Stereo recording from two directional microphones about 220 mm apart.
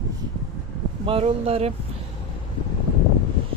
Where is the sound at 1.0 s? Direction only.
25° right (ahead or behind).